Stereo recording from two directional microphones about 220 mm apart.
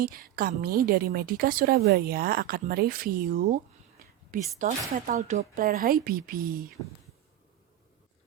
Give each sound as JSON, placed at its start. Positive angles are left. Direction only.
{"t": 0.0, "sound": "a woman's voice", "side_deg": -40}
{"t": 4.6, "sound": "speech", "side_deg": -35}